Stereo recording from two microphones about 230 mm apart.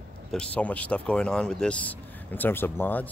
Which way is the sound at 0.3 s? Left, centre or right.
Centre.